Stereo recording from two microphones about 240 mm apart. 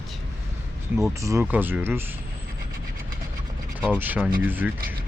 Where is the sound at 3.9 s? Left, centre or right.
Centre.